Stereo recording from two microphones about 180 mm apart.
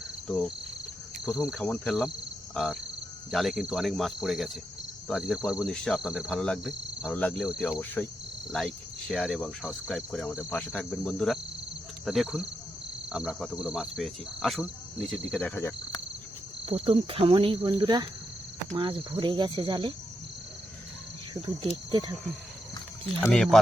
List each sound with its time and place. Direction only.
0.3 s cricket: 5° left (ahead or behind)
7.1 s speech: 10° left (ahead or behind)
7.4 s cricket: centre (ahead or behind)
8.0 s speech: 10° left (ahead or behind)
8.5 s cricket: centre (ahead or behind)
16.6 s speech: 30° right (ahead or behind)
21.6 s speech: 25° right (ahead or behind)
23.2 s cricket: 5° left (ahead or behind)